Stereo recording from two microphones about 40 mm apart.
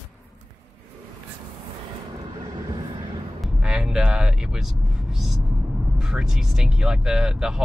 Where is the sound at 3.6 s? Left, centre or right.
Centre.